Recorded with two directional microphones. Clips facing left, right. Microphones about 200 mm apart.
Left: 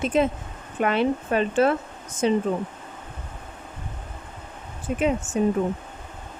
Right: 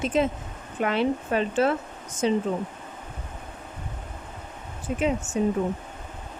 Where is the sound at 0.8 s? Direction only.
55° left (ahead or behind).